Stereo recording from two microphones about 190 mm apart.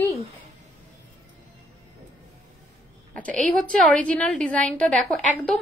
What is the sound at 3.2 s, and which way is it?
A woman's voice, 5° left (ahead or behind).